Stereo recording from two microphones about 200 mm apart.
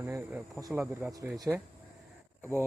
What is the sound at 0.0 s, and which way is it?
Speech, 10° right (ahead or behind).